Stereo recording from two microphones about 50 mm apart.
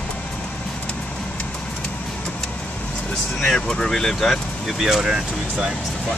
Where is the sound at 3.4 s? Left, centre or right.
Centre.